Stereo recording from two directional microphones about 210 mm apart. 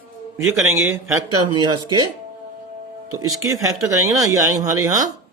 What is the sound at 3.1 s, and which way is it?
Speech, 15° right (ahead or behind).